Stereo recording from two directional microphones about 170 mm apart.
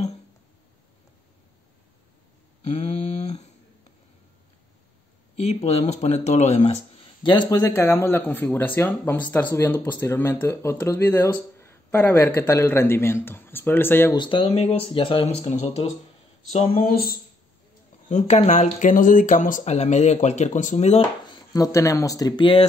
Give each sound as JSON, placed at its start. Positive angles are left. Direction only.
{"t": 2.6, "sound": "a sound", "side_deg": 40}
{"t": 5.3, "sound": "speech", "side_deg": 40}
{"t": 7.2, "sound": "speech", "side_deg": 25}
{"t": 14.1, "sound": "speech", "side_deg": 30}
{"t": 16.7, "sound": "speech", "side_deg": 60}
{"t": 18.1, "sound": "speech", "side_deg": 40}
{"t": 21.4, "sound": "speech", "side_deg": 20}